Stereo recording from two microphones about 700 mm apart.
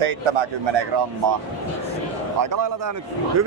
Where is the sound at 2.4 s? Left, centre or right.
Right.